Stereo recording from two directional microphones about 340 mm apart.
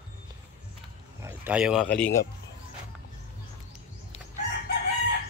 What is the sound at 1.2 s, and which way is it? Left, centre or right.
Speech, centre.